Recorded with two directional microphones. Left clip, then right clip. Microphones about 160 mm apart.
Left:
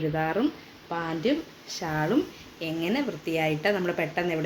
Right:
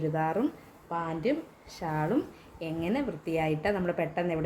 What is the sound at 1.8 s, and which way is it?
A woman's voice, 5° left (ahead or behind).